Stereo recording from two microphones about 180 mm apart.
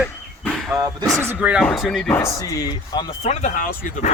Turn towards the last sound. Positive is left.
turn(degrees=50)  # may be behind; listen again after turning